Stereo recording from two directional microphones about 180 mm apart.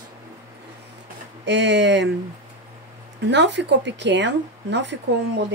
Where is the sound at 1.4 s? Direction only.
75° right (ahead or behind).